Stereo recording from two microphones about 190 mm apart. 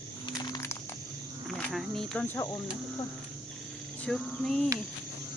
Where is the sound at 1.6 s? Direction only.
Centre (ahead or behind).